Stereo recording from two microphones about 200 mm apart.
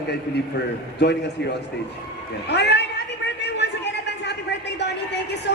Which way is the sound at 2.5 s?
55° left (ahead or behind).